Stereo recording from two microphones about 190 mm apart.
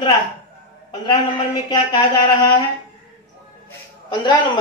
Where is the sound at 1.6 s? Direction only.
20° left (ahead or behind).